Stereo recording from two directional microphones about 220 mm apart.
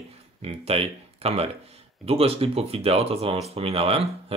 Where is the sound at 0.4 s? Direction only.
25° right (ahead or behind).